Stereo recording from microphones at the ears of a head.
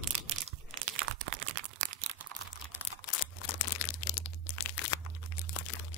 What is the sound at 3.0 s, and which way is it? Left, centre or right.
Crumpling, left.